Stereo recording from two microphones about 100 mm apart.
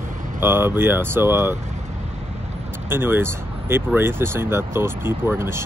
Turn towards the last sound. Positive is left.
turn(degrees=-25)  # may be behind; listen again after turning